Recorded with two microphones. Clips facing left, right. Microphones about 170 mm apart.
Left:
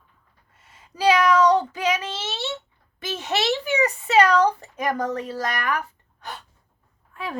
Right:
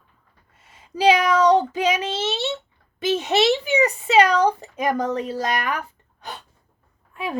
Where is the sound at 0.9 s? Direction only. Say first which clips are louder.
Right 1 dB; 20° right (ahead or behind).